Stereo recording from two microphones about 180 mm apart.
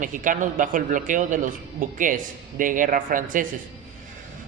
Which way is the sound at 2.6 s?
50° right (ahead or behind).